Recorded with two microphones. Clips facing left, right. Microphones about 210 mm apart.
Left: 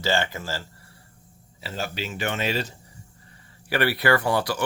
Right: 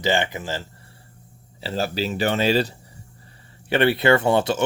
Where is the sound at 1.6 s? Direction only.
35° right (ahead or behind).